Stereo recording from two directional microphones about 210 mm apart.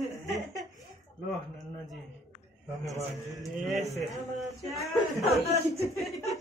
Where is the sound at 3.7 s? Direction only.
Centre (ahead or behind).